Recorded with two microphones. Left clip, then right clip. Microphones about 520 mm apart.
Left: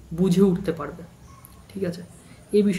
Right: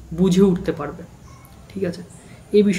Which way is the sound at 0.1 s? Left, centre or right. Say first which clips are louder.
Right 4 dB; left.